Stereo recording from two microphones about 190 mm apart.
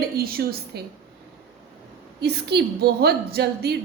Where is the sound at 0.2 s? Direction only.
55° right (ahead or behind).